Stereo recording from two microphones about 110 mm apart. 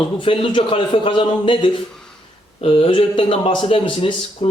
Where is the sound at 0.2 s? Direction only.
50° left (ahead or behind).